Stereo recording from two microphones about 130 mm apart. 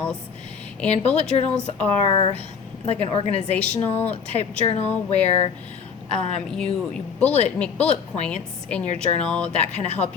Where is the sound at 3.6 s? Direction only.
10° left (ahead or behind).